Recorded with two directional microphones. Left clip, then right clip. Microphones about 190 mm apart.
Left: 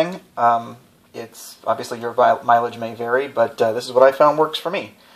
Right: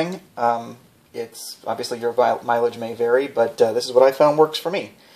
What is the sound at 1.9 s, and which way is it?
Speech, 30° right (ahead or behind).